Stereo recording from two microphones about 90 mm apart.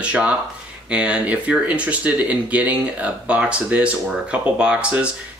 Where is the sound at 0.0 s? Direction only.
15° right (ahead or behind).